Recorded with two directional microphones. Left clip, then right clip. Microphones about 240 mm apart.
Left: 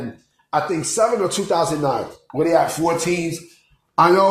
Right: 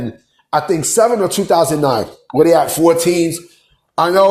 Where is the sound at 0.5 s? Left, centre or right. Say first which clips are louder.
Right 6 dB; right.